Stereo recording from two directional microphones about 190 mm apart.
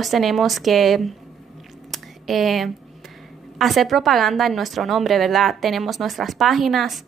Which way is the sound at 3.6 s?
Centre (ahead or behind).